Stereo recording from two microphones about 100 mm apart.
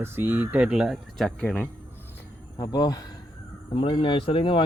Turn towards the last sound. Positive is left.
turn(degrees=60)  # may be behind; listen again after turning